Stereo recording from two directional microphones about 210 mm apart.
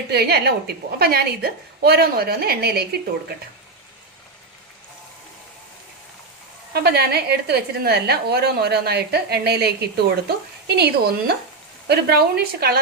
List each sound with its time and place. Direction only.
0.1 s a woman's voice: 50° right (ahead or behind)
6.7 s a woman's voice: 50° right (ahead or behind)